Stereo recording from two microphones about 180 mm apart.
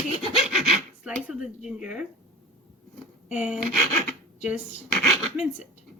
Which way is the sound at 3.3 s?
5° right (ahead or behind).